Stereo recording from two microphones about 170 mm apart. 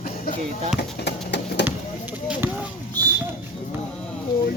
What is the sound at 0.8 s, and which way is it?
Speech, 85° left.